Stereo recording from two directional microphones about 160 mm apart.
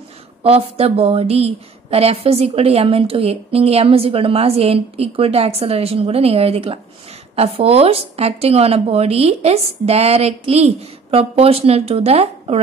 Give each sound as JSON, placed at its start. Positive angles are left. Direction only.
{"t": 0.4, "sound": "a woman's voice", "side_deg": -35}